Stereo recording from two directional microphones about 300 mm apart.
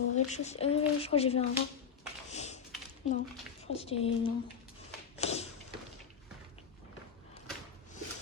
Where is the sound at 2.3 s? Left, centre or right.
Left.